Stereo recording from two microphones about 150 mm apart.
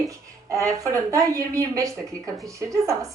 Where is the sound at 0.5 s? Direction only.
20° right (ahead or behind).